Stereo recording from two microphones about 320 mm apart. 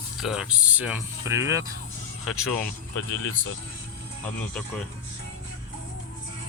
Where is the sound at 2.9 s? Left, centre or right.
Left.